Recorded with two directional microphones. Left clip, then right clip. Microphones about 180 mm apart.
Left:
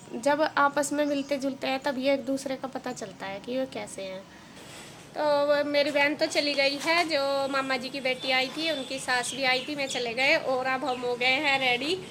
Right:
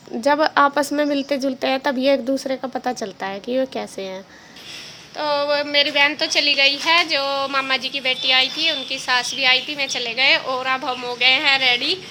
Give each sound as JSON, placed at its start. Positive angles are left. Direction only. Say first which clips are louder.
{"t": 0.2, "sound": "a woman's voice", "louder": "right 8 dB", "side_deg": -35}
{"t": 5.1, "sound": "a woman's voice", "louder": "right 4 dB", "side_deg": 0}